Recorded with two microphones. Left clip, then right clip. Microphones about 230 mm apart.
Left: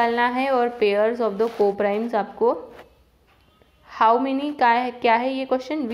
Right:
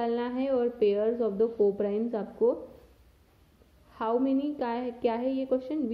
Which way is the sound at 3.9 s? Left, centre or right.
Centre.